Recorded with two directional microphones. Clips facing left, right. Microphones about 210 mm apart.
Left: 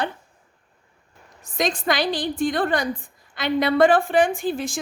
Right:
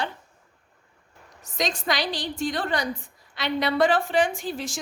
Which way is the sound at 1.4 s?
55° left (ahead or behind).